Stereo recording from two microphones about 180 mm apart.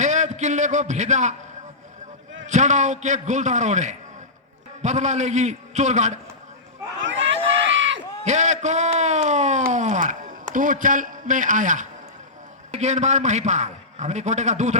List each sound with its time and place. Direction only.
0.0 s a man's voice: 40° right (ahead or behind)
2.5 s a man's voice: 40° right (ahead or behind)
7.0 s a sound: 90° right
7.7 s crowd: 90° right
8.2 s a sound: 40° right (ahead or behind)
12.7 s a man's voice: 40° right (ahead or behind)